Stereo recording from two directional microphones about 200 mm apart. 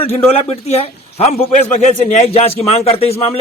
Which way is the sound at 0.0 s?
30° left (ahead or behind).